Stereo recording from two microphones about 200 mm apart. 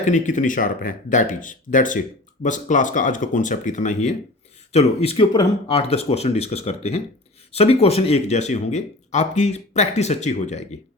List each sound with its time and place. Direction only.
0.0 s speech: 40° left (ahead or behind)